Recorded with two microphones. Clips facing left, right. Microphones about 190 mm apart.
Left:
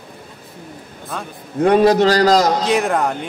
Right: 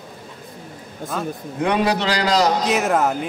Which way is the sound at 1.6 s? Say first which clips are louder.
Left 8 dB; 40° left (ahead or behind).